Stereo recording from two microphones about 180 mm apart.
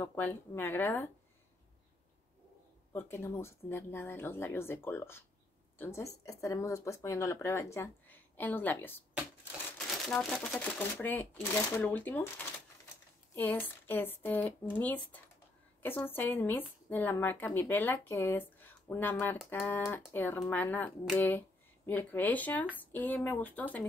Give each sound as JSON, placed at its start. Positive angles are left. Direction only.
{"t": 0.0, "sound": "speech", "side_deg": 10}
{"t": 2.9, "sound": "speech", "side_deg": 10}
{"t": 10.0, "sound": "speech", "side_deg": 0}
{"t": 13.3, "sound": "speech", "side_deg": 10}